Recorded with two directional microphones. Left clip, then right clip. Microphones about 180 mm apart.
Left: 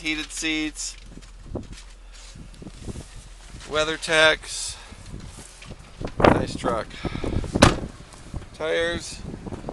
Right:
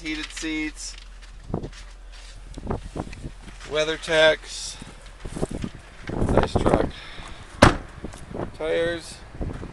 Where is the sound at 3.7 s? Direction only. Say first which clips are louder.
Even; 15° left (ahead or behind).